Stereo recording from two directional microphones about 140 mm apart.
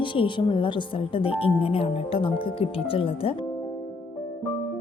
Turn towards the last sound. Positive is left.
turn(degrees=40)  # may be behind; listen again after turning